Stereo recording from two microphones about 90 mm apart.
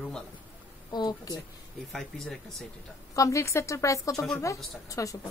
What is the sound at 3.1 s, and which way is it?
A woman's voice, 35° left (ahead or behind).